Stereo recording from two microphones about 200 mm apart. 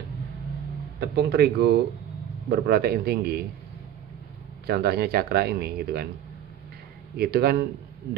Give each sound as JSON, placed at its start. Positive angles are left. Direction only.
{"t": 1.0, "sound": "speech", "side_deg": -55}
{"t": 4.6, "sound": "speech", "side_deg": -55}
{"t": 7.2, "sound": "speech", "side_deg": -55}